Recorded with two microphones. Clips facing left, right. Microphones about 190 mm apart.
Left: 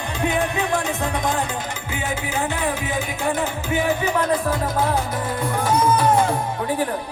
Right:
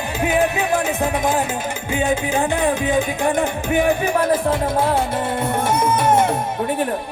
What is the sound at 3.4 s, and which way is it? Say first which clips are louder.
Music: right 4 dB; 55° right (ahead or behind).